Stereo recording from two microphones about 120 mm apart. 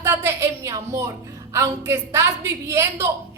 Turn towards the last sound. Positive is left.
turn(degrees=-25)  # may be behind; listen again after turning